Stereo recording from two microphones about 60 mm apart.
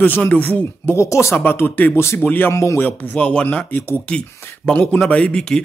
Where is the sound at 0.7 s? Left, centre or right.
Left.